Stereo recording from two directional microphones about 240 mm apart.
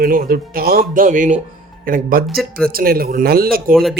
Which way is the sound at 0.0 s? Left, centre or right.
Right.